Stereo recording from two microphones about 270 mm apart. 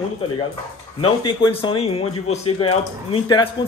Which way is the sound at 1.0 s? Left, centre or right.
Centre.